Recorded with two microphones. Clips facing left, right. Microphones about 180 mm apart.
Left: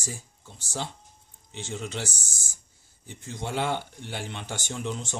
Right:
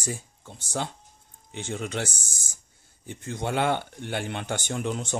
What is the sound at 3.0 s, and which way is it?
Speech, 55° right (ahead or behind).